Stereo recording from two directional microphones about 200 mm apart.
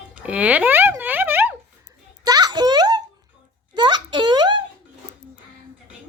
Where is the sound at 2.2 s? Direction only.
20° right (ahead or behind).